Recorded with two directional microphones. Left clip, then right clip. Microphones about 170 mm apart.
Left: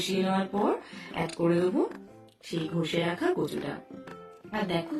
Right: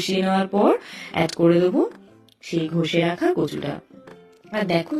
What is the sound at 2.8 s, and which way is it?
Speech, 35° right (ahead or behind).